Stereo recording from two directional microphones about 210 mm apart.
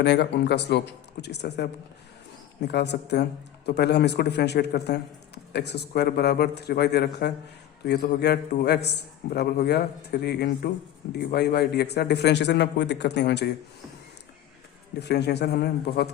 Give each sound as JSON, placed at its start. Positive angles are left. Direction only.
{"t": 0.0, "sound": "a man's voice", "side_deg": 55}
{"t": 14.9, "sound": "a man's voice", "side_deg": 50}